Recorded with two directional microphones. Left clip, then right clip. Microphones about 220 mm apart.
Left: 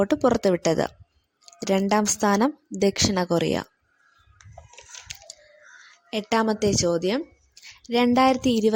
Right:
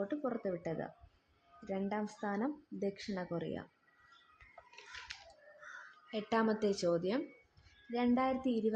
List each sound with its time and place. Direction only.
0.0 s speech: 55° left (ahead or behind)
6.1 s a woman's voice: 40° left (ahead or behind)